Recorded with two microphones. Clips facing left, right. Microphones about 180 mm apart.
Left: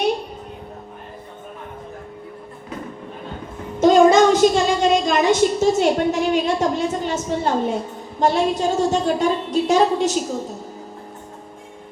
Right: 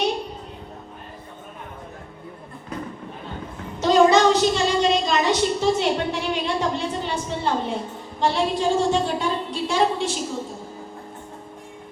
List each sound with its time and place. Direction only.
3.8 s a woman's voice: 50° left (ahead or behind)